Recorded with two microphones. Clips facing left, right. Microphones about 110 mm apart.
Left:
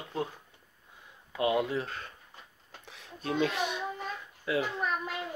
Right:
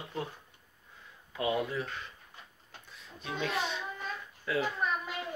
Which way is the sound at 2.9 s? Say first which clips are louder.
Left 5 dB; 70° left (ahead or behind).